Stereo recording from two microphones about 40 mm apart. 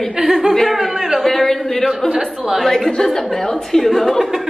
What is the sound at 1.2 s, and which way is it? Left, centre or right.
Speech, centre.